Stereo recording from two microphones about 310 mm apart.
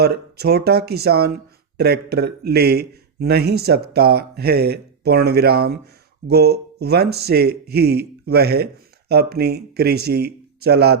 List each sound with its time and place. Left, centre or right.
0.0 s speech: right